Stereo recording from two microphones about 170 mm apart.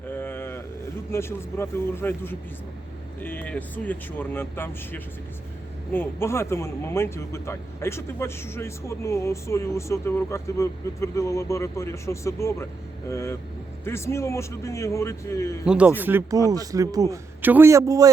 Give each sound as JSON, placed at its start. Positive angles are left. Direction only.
{"t": 0.1, "sound": "vehicle", "side_deg": 10}
{"t": 1.1, "sound": "speech", "side_deg": 15}
{"t": 15.6, "sound": "speech", "side_deg": -5}